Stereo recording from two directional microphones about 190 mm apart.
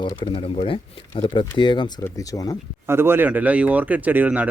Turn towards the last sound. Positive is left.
turn(degrees=-10)  # may be behind; listen again after turning